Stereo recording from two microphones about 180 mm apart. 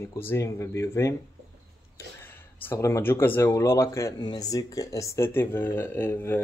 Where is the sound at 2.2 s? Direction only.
10° left (ahead or behind).